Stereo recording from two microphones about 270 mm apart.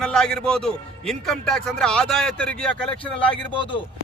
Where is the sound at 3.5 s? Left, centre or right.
Centre.